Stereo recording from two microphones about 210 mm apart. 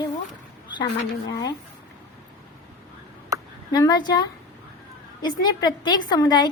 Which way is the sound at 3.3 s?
15° right (ahead or behind).